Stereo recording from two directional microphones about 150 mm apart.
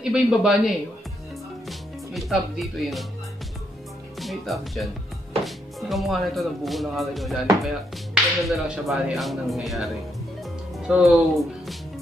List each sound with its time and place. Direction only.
0.0 s speech: 5° right (ahead or behind)
4.2 s speech: centre (ahead or behind)